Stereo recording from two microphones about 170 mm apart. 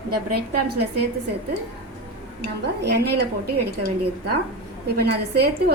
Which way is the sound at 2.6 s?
75° right (ahead or behind).